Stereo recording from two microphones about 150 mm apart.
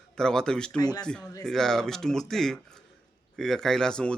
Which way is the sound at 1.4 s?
5° left (ahead or behind).